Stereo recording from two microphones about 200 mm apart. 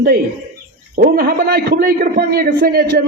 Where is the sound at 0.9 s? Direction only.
50° right (ahead or behind).